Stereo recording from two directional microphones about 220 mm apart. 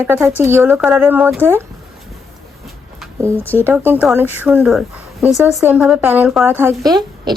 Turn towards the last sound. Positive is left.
turn(degrees=-20)  # may be behind; listen again after turning